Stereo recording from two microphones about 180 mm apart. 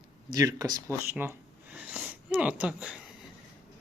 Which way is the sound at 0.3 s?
20° right (ahead or behind).